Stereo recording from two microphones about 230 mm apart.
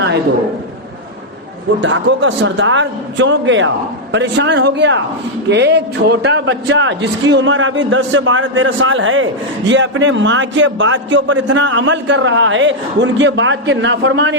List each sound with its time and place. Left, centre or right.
1.8 s a man's voice: right